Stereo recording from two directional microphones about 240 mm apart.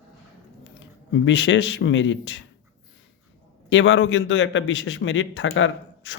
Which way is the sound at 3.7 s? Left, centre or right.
Left.